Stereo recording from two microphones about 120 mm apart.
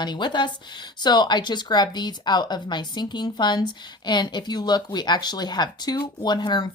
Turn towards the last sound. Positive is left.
turn(degrees=35)  # may be behind; listen again after turning